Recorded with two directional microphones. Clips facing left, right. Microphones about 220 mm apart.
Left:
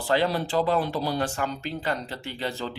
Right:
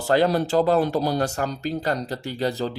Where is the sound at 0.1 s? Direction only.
45° right (ahead or behind).